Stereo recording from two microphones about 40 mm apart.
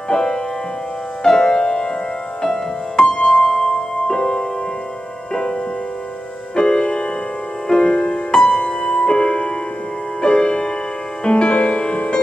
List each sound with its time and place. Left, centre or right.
0.1 s music: centre